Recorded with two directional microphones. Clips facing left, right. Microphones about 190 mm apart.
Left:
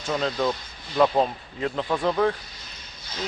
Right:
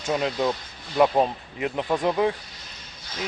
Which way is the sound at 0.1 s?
15° right (ahead or behind).